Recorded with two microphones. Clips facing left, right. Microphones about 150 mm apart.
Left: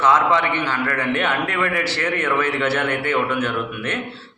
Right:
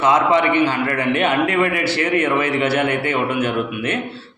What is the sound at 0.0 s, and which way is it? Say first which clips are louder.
A man's voice: right 2 dB; 15° right (ahead or behind).